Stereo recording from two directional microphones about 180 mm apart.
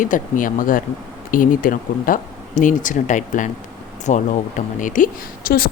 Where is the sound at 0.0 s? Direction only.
50° left (ahead or behind).